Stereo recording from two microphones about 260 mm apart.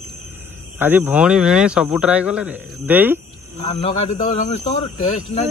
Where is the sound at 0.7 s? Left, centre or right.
Centre.